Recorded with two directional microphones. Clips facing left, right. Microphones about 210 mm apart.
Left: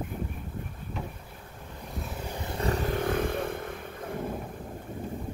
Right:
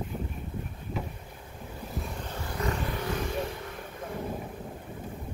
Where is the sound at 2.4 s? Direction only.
30° left (ahead or behind); by 3.6 s 55° left (ahead or behind).